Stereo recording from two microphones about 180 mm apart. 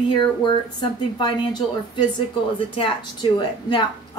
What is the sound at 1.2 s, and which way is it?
Speech, 25° left (ahead or behind).